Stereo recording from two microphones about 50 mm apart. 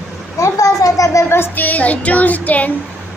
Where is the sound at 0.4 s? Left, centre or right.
Left.